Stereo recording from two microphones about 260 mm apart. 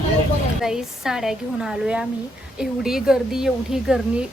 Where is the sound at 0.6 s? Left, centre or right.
Centre.